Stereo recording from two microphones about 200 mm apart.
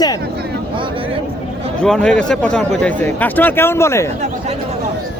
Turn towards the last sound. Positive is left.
turn(degrees=15)  # may be behind; listen again after turning